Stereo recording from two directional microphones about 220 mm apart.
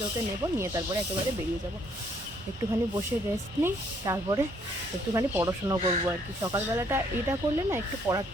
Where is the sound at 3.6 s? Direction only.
15° right (ahead or behind).